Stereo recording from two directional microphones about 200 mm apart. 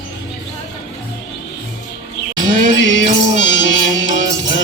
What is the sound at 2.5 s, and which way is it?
Music, 65° left (ahead or behind).